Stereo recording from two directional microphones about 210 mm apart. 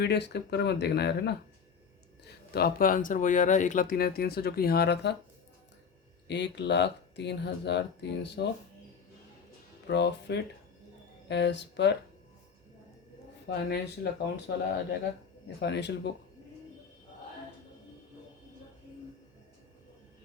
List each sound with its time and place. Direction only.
0.0 s speech: 50° left (ahead or behind)
6.2 s speech: 55° left (ahead or behind)
9.8 s speech: 55° left (ahead or behind)
13.5 s speech: 50° left (ahead or behind)